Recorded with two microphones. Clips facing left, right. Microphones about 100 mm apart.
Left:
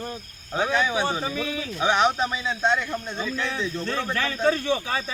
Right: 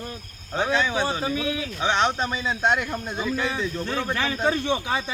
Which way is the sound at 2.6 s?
10° right (ahead or behind).